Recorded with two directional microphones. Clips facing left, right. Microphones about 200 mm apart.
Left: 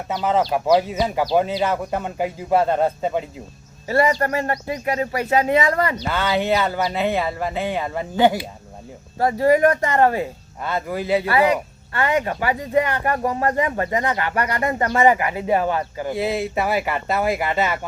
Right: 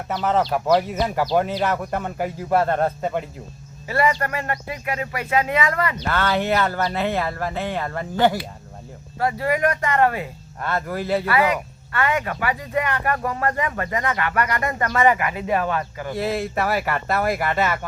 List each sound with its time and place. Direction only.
0.1 s a man's voice: 5° left (ahead or behind)
3.8 s speech: 35° left (ahead or behind)
6.0 s speech: 10° left (ahead or behind)
6.4 s a man's voice: centre (ahead or behind)
9.1 s speech: 35° left (ahead or behind)
10.6 s speech: 10° left (ahead or behind)
11.3 s speech: 30° left (ahead or behind)
16.8 s speech: 10° left (ahead or behind)